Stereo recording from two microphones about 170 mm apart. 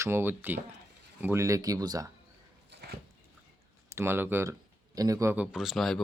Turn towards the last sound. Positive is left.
turn(degrees=0)  # may be behind; listen again after turning